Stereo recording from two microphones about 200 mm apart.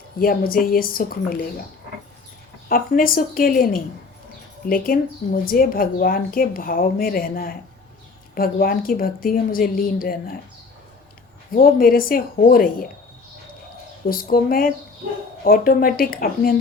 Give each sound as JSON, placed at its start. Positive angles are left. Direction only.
{"t": 0.2, "sound": "a woman's voice", "side_deg": 45}
{"t": 2.6, "sound": "a woman's voice", "side_deg": 45}
{"t": 11.5, "sound": "a woman's voice", "side_deg": 45}
{"t": 14.1, "sound": "a woman's voice", "side_deg": 45}